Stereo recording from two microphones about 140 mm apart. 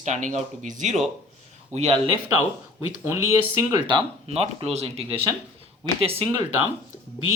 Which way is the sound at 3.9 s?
45° right (ahead or behind).